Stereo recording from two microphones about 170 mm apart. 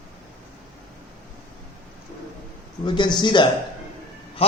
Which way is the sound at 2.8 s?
25° left (ahead or behind).